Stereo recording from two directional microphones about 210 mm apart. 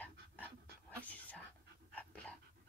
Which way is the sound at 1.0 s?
5° left (ahead or behind).